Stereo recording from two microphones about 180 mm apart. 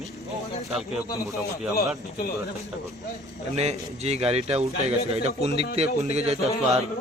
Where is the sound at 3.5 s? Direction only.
35° right (ahead or behind).